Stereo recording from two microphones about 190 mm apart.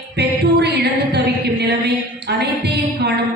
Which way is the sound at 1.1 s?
60° right (ahead or behind).